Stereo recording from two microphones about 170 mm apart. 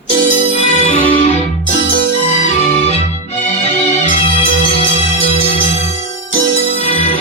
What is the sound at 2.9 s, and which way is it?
Music, 40° left (ahead or behind).